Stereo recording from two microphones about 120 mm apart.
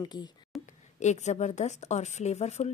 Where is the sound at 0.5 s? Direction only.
Centre (ahead or behind).